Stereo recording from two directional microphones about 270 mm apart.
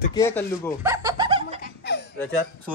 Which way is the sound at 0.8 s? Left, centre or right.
Centre.